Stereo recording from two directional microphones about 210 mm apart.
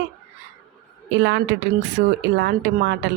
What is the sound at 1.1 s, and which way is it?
A woman's voice, 55° right (ahead or behind).